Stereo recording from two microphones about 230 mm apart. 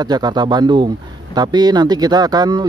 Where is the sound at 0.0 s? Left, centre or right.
Centre.